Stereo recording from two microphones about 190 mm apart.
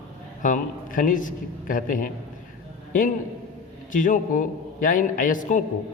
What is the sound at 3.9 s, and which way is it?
A man's voice, 45° left (ahead or behind).